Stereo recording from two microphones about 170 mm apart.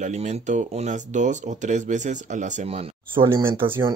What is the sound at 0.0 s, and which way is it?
Speech, 40° right (ahead or behind).